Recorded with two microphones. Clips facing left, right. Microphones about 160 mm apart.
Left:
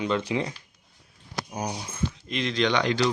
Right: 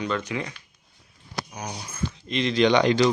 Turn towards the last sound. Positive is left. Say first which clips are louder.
# right 5 dB
turn(degrees=-15)  # may be behind; listen again after turning